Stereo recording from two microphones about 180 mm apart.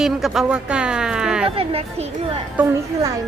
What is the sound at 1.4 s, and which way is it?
Speech, 30° right (ahead or behind).